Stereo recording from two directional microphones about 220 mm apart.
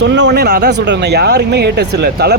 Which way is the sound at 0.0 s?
55° right (ahead or behind).